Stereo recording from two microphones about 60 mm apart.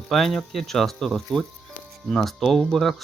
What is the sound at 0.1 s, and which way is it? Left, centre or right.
Speech, centre.